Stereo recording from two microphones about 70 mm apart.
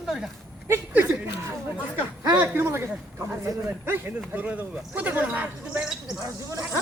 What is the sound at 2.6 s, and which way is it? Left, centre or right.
Speech, right.